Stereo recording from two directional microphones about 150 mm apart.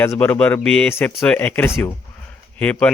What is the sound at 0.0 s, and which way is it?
Speech, 15° left (ahead or behind).